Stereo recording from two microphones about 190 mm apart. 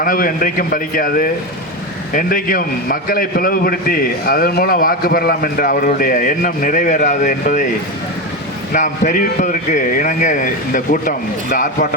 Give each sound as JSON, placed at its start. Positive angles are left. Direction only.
{"t": 0.0, "sound": "a man's voice", "side_deg": 50}
{"t": 8.7, "sound": "a man's voice", "side_deg": 40}